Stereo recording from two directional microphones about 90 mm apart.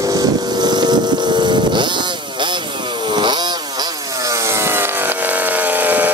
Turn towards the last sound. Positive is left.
turn(degrees=-20)  # may be behind; listen again after turning